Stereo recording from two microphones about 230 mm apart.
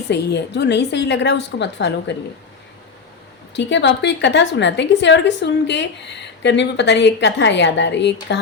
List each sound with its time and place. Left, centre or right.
0.1 s a woman's voice: left
3.5 s a woman's voice: left